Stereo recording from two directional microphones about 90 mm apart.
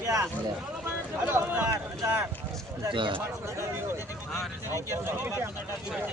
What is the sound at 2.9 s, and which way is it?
Speech, 65° right (ahead or behind).